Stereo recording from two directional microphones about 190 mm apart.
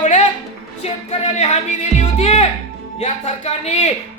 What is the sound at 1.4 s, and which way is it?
Music, 35° left (ahead or behind).